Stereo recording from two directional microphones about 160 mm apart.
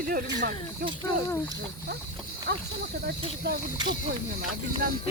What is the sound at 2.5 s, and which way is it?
Speech, 90° right.